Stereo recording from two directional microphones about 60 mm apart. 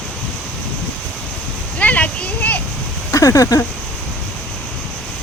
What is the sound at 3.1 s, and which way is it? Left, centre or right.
Speech, left.